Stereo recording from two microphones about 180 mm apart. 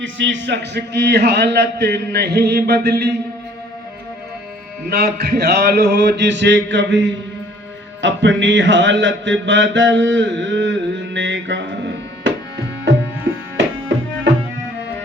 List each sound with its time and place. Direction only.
0.0 s a man's voice: 90° right; by 3.1 s 65° right (ahead or behind)
4.9 s a sound: 60° right (ahead or behind); by 7.2 s 90° right
8.0 s music: 85° right